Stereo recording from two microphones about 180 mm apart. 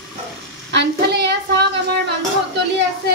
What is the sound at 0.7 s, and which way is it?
A woman's voice, 70° right (ahead or behind).